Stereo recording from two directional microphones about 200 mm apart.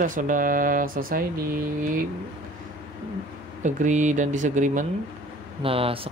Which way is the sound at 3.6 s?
40° right (ahead or behind).